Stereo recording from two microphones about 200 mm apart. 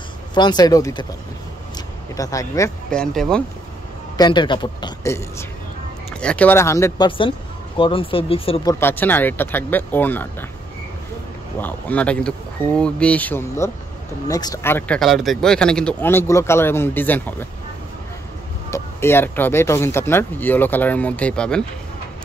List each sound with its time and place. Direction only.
0.3 s speech: 20° left (ahead or behind)
2.1 s speech: 15° left (ahead or behind)
2.9 s speech: 5° left (ahead or behind)
4.2 s speech: 25° left (ahead or behind)
6.2 s speech: 5° left (ahead or behind)
7.1 s speech: 25° left (ahead or behind)
8.7 s speech: 10° left (ahead or behind)
11.6 s speech: 5° left (ahead or behind)
18.7 s speech: 10° left (ahead or behind)